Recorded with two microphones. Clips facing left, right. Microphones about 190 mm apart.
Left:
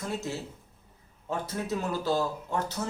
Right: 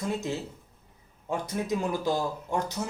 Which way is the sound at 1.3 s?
15° right (ahead or behind).